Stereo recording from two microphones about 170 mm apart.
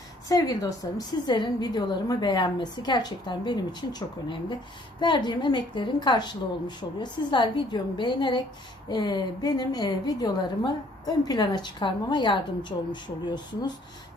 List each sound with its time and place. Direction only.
0.3 s a woman's voice: 20° left (ahead or behind)